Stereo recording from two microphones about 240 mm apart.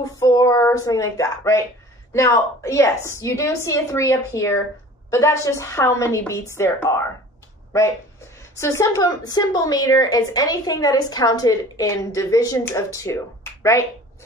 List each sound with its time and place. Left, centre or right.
0.0 s a woman's voice: centre
8.5 s a woman's voice: centre